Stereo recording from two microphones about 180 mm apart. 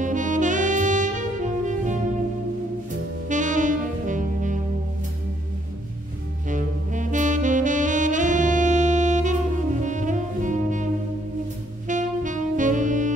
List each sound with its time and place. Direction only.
0.0 s saxophone: 45° right (ahead or behind)
3.3 s saxophone: 45° right (ahead or behind)
6.5 s saxophone: 45° right (ahead or behind)
11.9 s saxophone: 45° right (ahead or behind)